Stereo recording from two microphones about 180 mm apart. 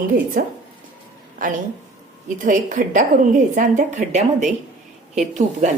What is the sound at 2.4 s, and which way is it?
A woman's voice, 45° right (ahead or behind).